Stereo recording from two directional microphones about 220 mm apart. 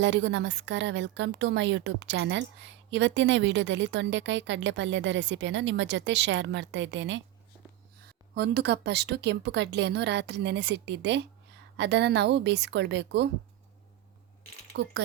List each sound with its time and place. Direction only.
0.0 s a woman's voice: 55° right (ahead or behind)
8.4 s a woman's voice: 50° right (ahead or behind)
14.7 s speech: 50° right (ahead or behind)